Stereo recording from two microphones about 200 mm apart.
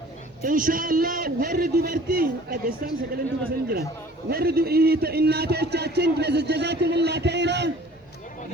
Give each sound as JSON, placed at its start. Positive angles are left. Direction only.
{"t": 0.4, "sound": "a man's voice", "side_deg": -45}
{"t": 4.3, "sound": "a man's voice", "side_deg": -50}